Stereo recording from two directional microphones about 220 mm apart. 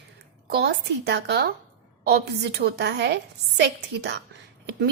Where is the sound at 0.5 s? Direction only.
50° right (ahead or behind).